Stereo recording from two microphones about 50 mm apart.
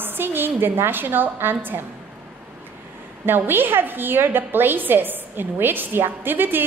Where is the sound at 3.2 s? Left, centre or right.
Right.